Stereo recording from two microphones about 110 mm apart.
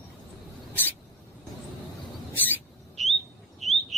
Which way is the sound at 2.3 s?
15° left (ahead or behind).